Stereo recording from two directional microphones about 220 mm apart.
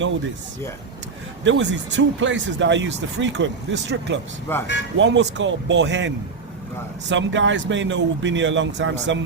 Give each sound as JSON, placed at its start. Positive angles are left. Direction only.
{"t": 1.5, "sound": "speech", "side_deg": -55}
{"t": 4.5, "sound": "speech", "side_deg": 10}
{"t": 4.9, "sound": "speech", "side_deg": -55}